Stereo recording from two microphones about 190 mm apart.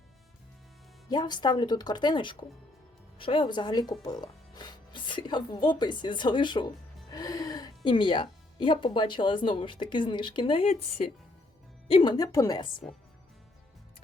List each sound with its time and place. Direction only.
1.0 s speech: 20° left (ahead or behind)
7.1 s gasp: 20° left (ahead or behind)
7.9 s speech: 25° left (ahead or behind)
11.9 s speech: 25° left (ahead or behind)